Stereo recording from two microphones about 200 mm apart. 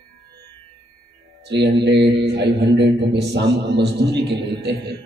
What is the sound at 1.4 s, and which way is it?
A man's voice, 55° right (ahead or behind).